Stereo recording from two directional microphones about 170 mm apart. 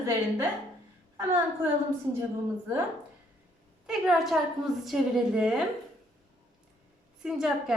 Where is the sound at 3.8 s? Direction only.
5° right (ahead or behind).